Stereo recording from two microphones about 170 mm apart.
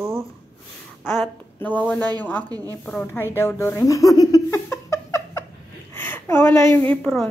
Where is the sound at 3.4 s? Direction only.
15° left (ahead or behind).